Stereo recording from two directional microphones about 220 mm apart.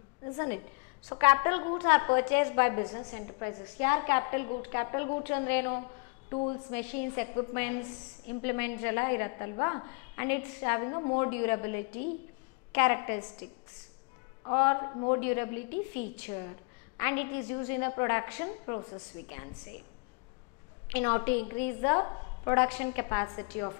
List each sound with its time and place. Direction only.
1.1 s a woman's voice: 15° left (ahead or behind)
6.3 s a woman's voice: 25° left (ahead or behind)
6.7 s a woman's voice: 10° left (ahead or behind)
14.4 s a woman's voice: 15° left (ahead or behind)
15.7 s a woman's voice: 45° left (ahead or behind)
16.2 s a woman's voice: 20° left (ahead or behind)
20.9 s a woman's voice: 10° left (ahead or behind)